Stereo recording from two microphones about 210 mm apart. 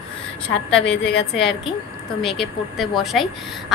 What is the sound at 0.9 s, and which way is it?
Speech, 55° left (ahead or behind).